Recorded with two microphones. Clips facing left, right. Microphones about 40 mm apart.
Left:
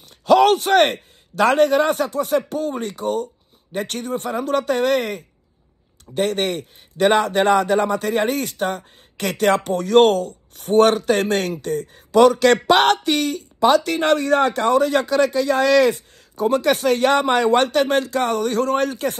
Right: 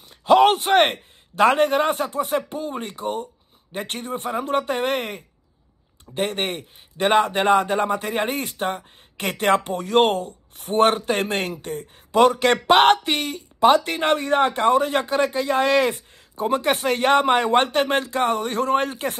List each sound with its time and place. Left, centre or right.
0.2 s a man's voice: right
9.8 s speech: left
10.0 s speech: right